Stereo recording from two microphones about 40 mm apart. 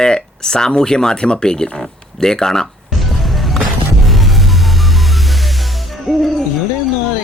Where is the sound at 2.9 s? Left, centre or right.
Centre.